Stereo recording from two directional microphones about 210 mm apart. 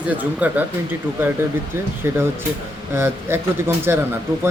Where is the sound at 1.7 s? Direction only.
10° right (ahead or behind).